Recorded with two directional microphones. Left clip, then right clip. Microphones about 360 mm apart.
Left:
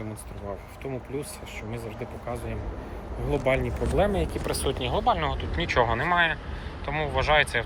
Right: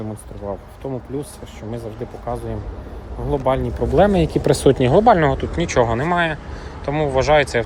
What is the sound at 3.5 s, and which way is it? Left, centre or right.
Speech, centre.